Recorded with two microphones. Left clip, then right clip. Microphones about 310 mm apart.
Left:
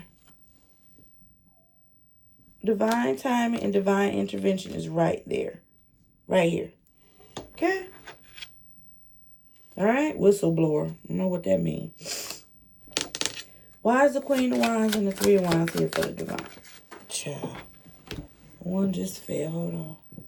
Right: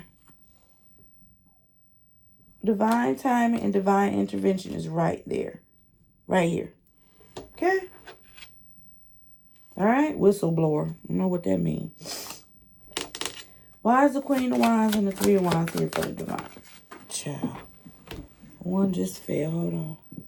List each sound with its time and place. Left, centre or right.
2.6 s speech: centre
9.7 s speech: centre
13.1 s coin: centre
13.8 s speech: centre
17.1 s speech: centre
18.6 s speech: centre